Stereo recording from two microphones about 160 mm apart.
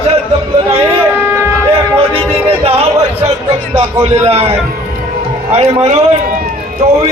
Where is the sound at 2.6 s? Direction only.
40° right (ahead or behind).